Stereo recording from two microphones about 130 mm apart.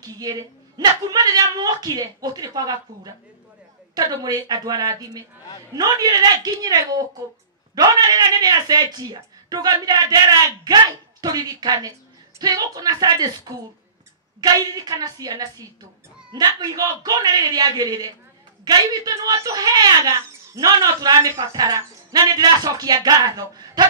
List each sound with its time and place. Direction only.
0.0 s speech: 30° right (ahead or behind)